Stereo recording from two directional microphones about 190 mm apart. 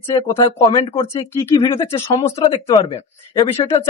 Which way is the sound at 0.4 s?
25° left (ahead or behind).